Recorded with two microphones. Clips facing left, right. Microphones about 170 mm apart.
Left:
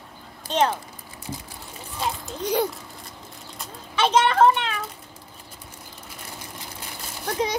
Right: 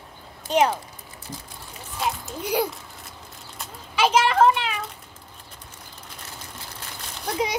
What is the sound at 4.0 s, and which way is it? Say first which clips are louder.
Children playing: even; 10° right (ahead or behind).